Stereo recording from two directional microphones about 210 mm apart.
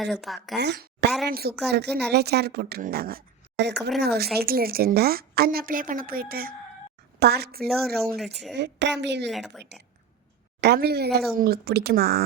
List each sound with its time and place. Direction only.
0.0 s a woman's voice: centre (ahead or behind)
0.5 s a woman's voice: 55° right (ahead or behind)
9.3 s a woman's voice: centre (ahead or behind)
10.6 s a woman's voice: 50° right (ahead or behind)